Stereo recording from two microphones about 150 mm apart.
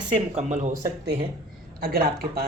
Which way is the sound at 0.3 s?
50° right (ahead or behind).